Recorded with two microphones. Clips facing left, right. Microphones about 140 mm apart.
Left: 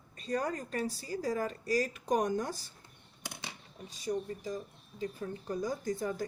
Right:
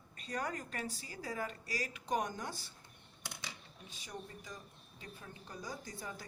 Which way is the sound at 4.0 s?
35° left (ahead or behind).